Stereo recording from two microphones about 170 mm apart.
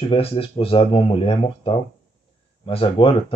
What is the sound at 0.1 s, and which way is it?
Speech, 35° left (ahead or behind).